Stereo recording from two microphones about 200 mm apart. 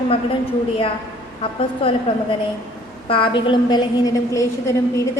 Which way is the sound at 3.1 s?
25° left (ahead or behind).